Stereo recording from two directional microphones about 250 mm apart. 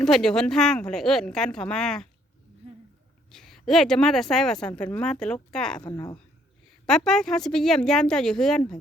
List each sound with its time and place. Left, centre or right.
0.0 s speech: centre
3.3 s speech: centre
5.8 s a woman's voice: centre
6.8 s speech: centre